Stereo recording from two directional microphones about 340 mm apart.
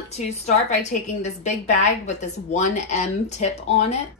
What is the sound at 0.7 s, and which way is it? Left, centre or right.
A woman's voice, centre.